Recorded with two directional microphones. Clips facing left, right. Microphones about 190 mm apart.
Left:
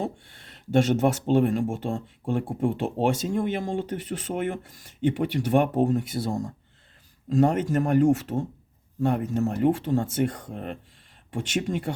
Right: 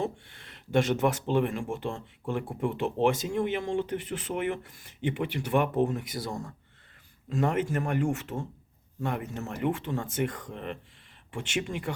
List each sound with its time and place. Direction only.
0.0 s speech: 35° left (ahead or behind)